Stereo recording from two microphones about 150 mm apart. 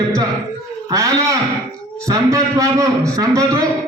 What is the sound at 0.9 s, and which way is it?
A man's voice, 20° right (ahead or behind).